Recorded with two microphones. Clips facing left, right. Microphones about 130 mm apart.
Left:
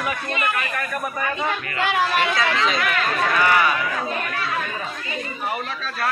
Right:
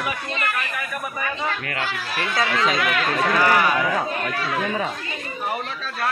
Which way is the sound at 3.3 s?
40° right (ahead or behind).